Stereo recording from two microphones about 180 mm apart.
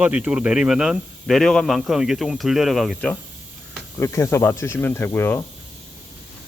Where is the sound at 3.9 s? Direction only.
15° left (ahead or behind).